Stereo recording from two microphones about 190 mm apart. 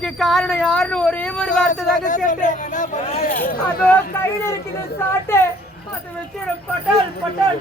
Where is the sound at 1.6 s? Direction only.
40° left (ahead or behind).